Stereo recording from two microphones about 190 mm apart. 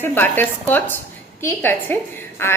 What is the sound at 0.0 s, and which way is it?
A woman's voice, 10° left (ahead or behind).